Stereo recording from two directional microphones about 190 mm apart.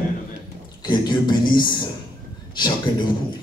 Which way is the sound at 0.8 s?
25° left (ahead or behind).